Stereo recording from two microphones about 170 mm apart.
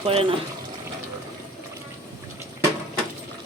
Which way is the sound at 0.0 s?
35° right (ahead or behind).